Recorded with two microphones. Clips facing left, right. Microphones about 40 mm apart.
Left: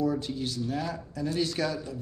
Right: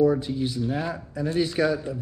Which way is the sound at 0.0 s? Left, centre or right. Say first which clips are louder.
Right 7 dB; centre.